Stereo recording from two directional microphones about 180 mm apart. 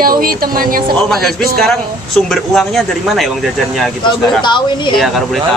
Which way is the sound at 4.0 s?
25° left (ahead or behind).